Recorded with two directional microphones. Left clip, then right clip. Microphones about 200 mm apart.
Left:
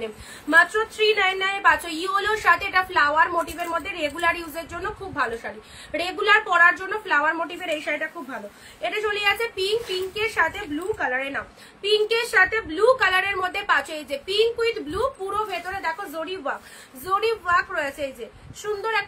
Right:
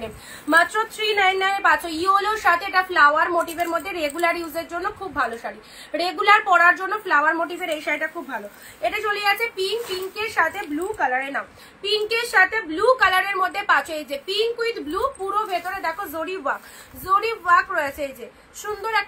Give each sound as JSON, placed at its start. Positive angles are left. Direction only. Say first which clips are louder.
{"t": 0.0, "sound": "a woman's voice", "louder": "even", "side_deg": 15}
{"t": 5.9, "sound": "a woman's voice", "louder": "right 3 dB", "side_deg": 15}